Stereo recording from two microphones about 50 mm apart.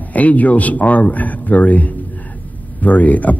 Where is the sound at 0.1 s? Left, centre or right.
Left.